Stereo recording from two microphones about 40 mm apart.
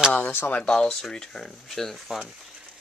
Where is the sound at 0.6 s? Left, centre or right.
Left.